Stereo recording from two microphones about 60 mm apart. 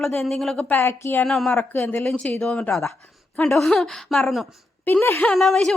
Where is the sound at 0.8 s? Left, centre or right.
Left.